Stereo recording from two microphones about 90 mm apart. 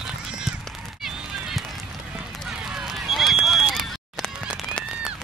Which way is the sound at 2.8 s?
Centre (ahead or behind).